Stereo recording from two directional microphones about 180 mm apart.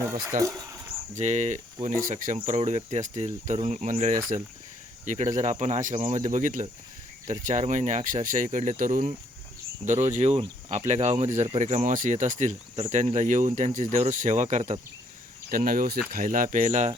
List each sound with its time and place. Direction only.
0.3 s speech: 15° right (ahead or behind)
1.1 s speech: 40° right (ahead or behind)
15.4 s speech: 50° right (ahead or behind)